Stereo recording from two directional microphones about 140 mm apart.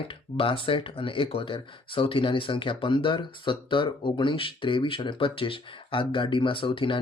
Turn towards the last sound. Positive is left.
turn(degrees=35)  # may be behind; listen again after turning